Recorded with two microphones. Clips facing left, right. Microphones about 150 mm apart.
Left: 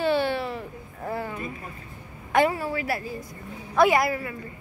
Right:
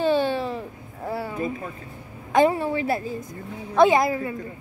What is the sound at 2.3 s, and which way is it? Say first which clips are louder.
A woman's voice: right 3 dB; 25° right (ahead or behind).